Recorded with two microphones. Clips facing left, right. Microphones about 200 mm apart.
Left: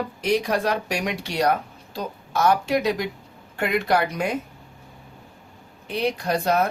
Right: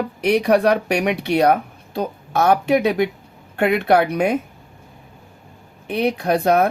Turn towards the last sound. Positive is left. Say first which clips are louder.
# right 5 dB
turn(degrees=-60)  # may be behind; listen again after turning